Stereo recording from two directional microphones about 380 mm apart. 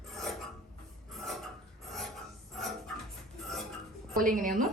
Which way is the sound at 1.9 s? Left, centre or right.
Centre.